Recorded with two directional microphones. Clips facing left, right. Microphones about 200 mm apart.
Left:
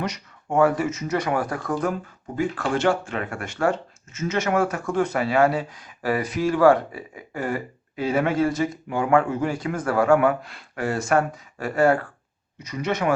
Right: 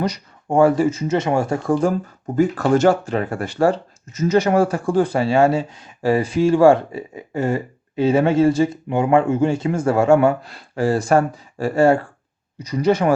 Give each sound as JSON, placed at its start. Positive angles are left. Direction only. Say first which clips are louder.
{"t": 0.0, "sound": "speech", "louder": "right 6 dB", "side_deg": -35}
{"t": 2.2, "sound": "speech", "louder": "right 8 dB", "side_deg": -45}